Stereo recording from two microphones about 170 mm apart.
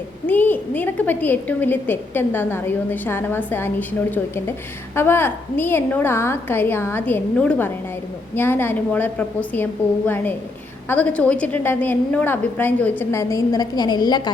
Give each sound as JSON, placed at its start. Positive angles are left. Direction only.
{"t": 0.3, "sound": "a woman's voice", "side_deg": 10}
{"t": 10.8, "sound": "a woman's voice", "side_deg": 10}